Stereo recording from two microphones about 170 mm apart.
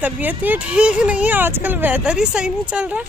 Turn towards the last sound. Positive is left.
turn(degrees=-5)  # may be behind; listen again after turning